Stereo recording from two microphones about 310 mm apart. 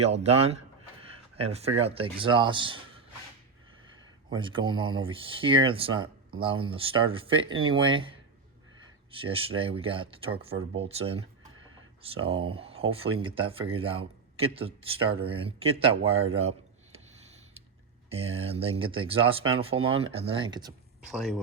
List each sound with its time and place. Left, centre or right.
0.0 s speech: right
4.3 s speech: centre
9.6 s speech: centre
18.1 s speech: centre
21.0 s speech: centre